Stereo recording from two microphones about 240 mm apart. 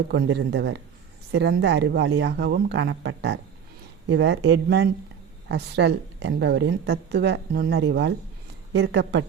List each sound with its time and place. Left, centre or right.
0.1 s a woman's voice: right